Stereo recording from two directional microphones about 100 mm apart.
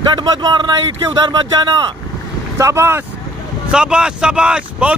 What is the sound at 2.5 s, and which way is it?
Speech, 25° right (ahead or behind).